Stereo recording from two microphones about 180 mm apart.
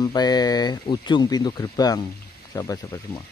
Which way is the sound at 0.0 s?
20° left (ahead or behind).